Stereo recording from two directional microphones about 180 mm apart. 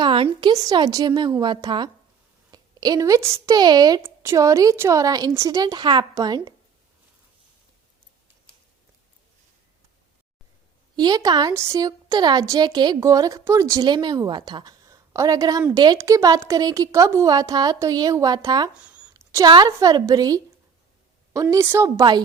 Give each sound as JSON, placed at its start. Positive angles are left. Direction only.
{"t": 0.0, "sound": "a woman's voice", "side_deg": -25}
{"t": 10.9, "sound": "a woman's voice", "side_deg": -20}
{"t": 18.7, "sound": "a sound", "side_deg": -5}
{"t": 19.1, "sound": "a woman's voice", "side_deg": -20}
{"t": 21.5, "sound": "a woman's voice", "side_deg": -15}